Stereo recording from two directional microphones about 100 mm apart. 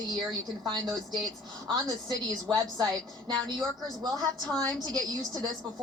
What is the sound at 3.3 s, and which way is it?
A woman's voice, 45° right (ahead or behind).